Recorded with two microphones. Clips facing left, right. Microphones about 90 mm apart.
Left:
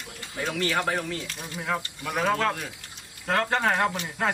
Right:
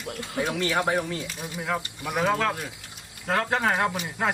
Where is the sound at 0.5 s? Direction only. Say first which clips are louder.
Right 1 dB; 20° right (ahead or behind).